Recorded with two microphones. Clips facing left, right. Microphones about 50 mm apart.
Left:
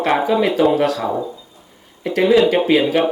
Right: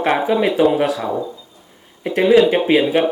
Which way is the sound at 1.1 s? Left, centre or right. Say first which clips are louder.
Even; centre.